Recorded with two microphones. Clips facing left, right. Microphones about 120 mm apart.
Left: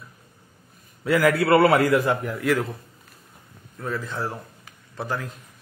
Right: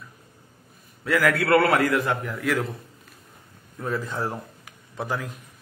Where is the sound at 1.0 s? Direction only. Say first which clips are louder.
Left 3 dB; centre (ahead or behind).